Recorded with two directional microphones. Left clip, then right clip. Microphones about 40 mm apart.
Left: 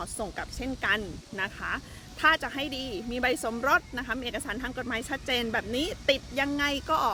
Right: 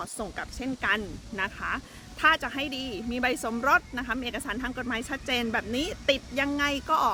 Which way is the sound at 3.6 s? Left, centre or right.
Right.